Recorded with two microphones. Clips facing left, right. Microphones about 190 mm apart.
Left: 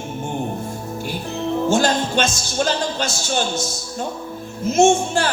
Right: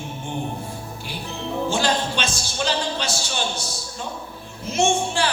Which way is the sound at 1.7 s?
45° left (ahead or behind).